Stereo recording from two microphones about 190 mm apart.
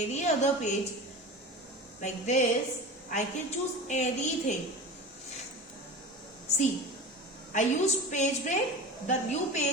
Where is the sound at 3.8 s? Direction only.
40° left (ahead or behind).